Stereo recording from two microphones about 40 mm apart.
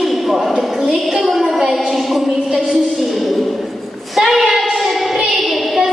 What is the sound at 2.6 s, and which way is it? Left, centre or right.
Speech, centre.